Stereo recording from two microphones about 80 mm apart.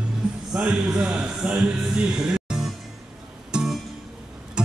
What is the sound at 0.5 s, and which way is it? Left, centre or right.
Music, centre.